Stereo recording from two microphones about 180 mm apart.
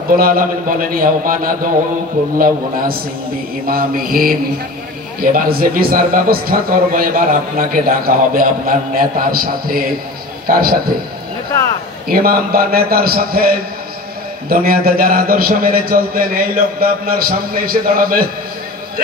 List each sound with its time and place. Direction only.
0.1 s a man's voice: 50° right (ahead or behind)
12.1 s a man's voice: 55° right (ahead or behind)